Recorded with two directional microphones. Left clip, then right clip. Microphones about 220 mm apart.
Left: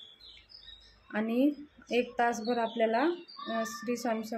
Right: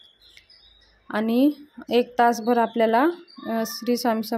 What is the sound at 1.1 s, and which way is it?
A woman's voice, 40° right (ahead or behind).